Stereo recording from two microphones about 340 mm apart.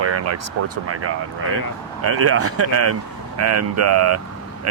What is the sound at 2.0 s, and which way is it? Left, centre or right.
Speech, right.